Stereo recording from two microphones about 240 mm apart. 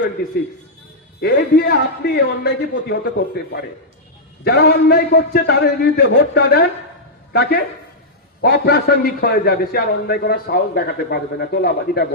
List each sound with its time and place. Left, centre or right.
1.2 s a man's voice: left
8.4 s a man's voice: left